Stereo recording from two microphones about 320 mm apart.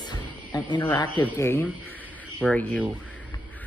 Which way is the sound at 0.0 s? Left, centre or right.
Centre.